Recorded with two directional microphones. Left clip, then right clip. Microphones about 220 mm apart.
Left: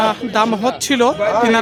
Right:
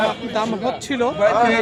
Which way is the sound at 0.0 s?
40° left (ahead or behind).